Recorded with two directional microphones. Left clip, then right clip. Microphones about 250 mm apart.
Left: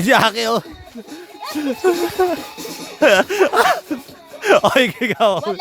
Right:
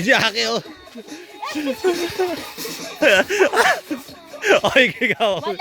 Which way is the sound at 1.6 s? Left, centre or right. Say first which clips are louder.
Left 4 dB; centre.